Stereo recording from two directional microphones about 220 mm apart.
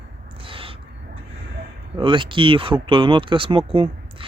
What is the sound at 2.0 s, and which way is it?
Speech, 20° right (ahead or behind).